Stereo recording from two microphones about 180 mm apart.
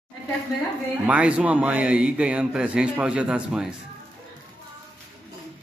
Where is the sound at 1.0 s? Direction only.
5° right (ahead or behind).